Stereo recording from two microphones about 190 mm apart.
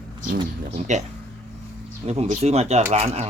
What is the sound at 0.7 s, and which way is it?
Speech, 40° right (ahead or behind).